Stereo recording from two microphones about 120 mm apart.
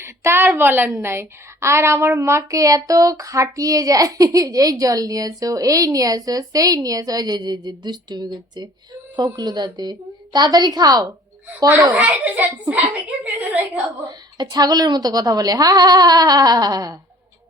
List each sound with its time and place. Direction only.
0.0 s a woman's voice: 20° right (ahead or behind)
11.9 s a woman's voice: 15° right (ahead or behind)
14.3 s speech: 35° right (ahead or behind)